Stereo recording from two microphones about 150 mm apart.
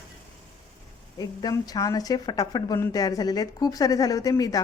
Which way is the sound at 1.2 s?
25° left (ahead or behind).